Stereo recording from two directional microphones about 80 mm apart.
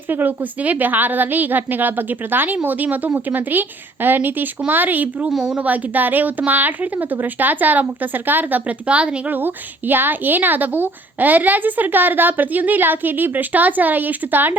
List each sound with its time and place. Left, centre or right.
0.1 s a woman's voice: right
5.3 s speech: centre
5.5 s a woman's voice: right